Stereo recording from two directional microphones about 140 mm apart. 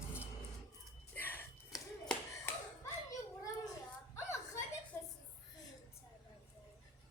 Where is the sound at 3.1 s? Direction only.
25° left (ahead or behind).